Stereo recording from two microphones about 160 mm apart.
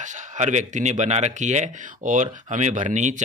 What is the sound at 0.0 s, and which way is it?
Speech, 50° right (ahead or behind).